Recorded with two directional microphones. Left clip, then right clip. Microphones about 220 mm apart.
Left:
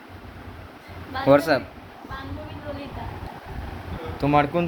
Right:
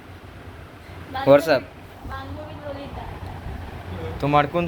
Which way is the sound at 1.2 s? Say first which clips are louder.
Right 2 dB; 10° left (ahead or behind).